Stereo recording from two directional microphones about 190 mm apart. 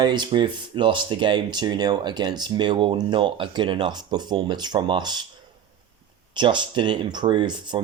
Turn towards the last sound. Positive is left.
turn(degrees=-25)  # may be behind; listen again after turning